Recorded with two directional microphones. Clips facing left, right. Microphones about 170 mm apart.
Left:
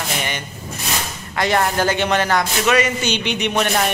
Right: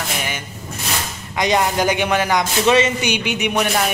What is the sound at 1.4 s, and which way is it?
Speech, 15° right (ahead or behind).